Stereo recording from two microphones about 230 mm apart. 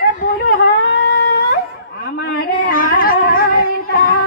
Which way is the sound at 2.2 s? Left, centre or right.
Left.